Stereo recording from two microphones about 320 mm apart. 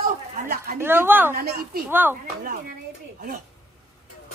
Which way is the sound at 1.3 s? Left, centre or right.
Right.